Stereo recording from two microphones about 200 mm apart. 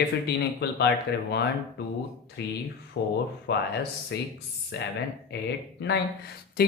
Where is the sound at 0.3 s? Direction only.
60° left (ahead or behind).